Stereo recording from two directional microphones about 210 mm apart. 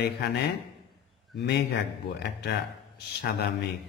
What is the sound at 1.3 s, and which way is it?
A man's voice, 55° left (ahead or behind).